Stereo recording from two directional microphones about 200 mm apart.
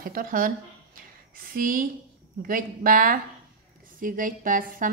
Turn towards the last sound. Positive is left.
turn(degrees=-45)  # may be behind; listen again after turning